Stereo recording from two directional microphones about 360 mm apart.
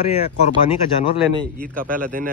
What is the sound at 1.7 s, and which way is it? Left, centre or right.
Speech, right.